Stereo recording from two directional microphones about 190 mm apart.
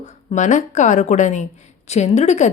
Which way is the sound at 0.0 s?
40° left (ahead or behind).